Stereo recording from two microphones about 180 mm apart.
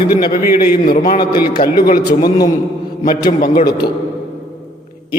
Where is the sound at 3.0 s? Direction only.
55° left (ahead or behind).